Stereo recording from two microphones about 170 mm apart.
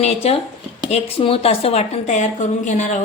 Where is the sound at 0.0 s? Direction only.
35° left (ahead or behind).